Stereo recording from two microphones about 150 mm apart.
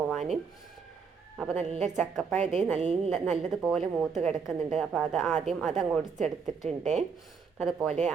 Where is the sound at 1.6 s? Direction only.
45° right (ahead or behind).